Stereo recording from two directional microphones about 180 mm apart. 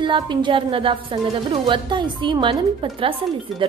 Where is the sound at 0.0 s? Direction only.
25° right (ahead or behind).